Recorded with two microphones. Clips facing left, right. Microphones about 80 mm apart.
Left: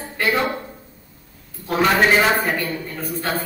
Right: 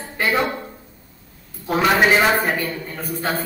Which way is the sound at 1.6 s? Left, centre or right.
Centre.